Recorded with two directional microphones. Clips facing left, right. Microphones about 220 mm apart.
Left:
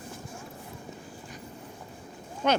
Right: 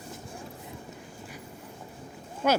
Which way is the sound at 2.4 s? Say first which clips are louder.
Right 1 dB; 5° right (ahead or behind).